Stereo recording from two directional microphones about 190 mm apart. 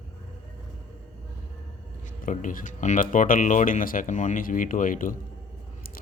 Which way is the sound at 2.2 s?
45° left (ahead or behind).